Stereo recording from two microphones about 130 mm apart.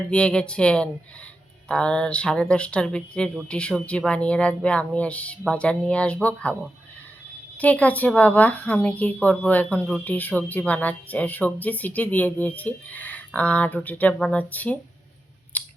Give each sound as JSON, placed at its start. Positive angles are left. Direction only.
{"t": 0.1, "sound": "speech", "side_deg": 10}
{"t": 7.6, "sound": "speech", "side_deg": 10}
{"t": 15.5, "sound": "scissors", "side_deg": 10}